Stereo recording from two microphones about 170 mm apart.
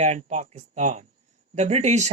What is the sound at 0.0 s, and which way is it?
Speech, 40° right (ahead or behind).